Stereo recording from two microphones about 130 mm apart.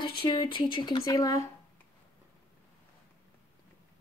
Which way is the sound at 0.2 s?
40° left (ahead or behind).